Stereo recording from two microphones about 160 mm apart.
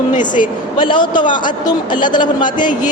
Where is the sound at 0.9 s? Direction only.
30° left (ahead or behind).